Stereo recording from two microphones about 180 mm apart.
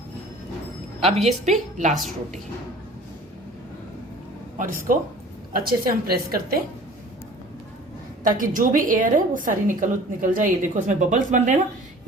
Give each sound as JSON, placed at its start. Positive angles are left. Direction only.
{"t": 0.9, "sound": "a woman's voice", "side_deg": -35}
{"t": 4.5, "sound": "a woman's voice", "side_deg": -50}
{"t": 8.2, "sound": "a woman's voice", "side_deg": -50}